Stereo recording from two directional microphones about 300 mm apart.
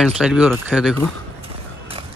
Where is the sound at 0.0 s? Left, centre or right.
Centre.